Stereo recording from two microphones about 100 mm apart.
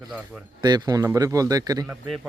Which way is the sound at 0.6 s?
45° right (ahead or behind).